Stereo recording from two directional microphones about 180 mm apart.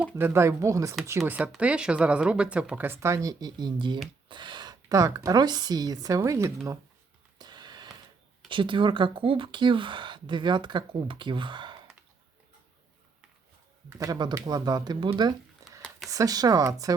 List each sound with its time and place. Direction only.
0.0 s speech: 10° right (ahead or behind)
1.3 s a woman's voice: 5° right (ahead or behind)
7.3 s a sound: 25° right (ahead or behind)
8.4 s speech: 25° right (ahead or behind)
14.0 s speech: 20° right (ahead or behind)
15.6 s a sound: 20° right (ahead or behind)
16.0 s speech: 20° right (ahead or behind)